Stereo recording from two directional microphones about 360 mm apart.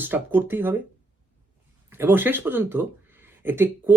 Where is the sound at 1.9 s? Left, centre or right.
Centre.